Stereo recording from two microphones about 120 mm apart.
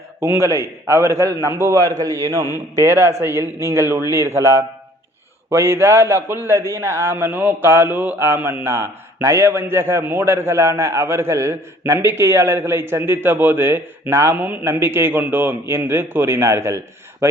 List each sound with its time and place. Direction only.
0.2 s a man's voice: 20° right (ahead or behind)